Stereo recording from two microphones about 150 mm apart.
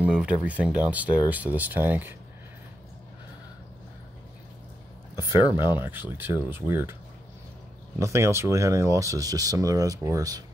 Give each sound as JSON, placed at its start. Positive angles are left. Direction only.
{"t": 0.0, "sound": "speech", "side_deg": -10}
{"t": 5.3, "sound": "speech", "side_deg": -15}
{"t": 8.0, "sound": "speech", "side_deg": -20}